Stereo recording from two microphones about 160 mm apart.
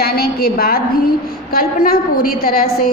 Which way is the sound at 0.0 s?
75° left (ahead or behind).